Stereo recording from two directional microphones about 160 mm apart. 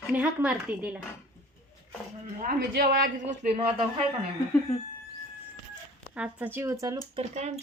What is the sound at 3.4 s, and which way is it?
Speech, 40° right (ahead or behind).